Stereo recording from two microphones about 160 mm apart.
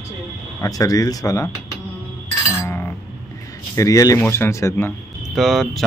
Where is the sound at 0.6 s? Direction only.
20° left (ahead or behind).